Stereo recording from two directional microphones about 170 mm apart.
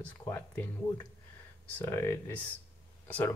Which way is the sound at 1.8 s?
15° left (ahead or behind).